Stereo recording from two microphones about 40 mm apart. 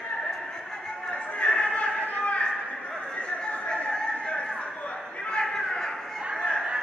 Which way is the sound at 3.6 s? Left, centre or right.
Left.